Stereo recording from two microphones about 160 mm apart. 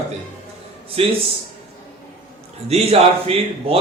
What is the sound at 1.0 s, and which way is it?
Speech, 35° right (ahead or behind).